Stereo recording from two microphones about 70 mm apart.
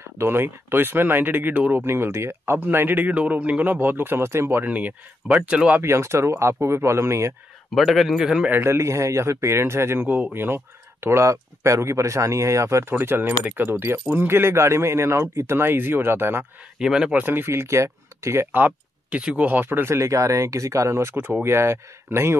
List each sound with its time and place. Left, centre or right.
0.2 s speech: right
1.8 s speech: right
3.2 s speech: centre
5.8 s speech: right
7.7 s a man's voice: centre
8.6 s speech: right
10.0 s speech: right
16.7 s speech: centre
17.1 s speech: right
18.5 s speech: right